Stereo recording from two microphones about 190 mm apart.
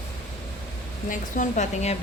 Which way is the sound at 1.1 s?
40° left (ahead or behind).